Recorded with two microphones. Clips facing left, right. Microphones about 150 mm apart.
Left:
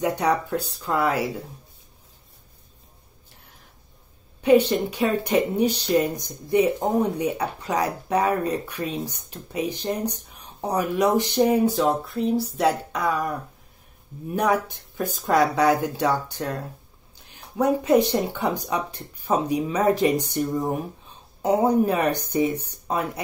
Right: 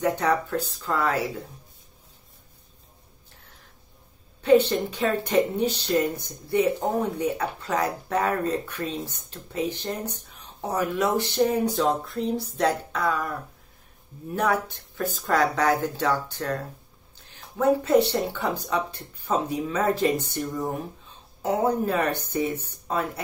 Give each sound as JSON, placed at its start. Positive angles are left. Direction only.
{"t": 0.0, "sound": "speech", "side_deg": 15}
{"t": 4.4, "sound": "speech", "side_deg": 10}
{"t": 11.7, "sound": "speech", "side_deg": 0}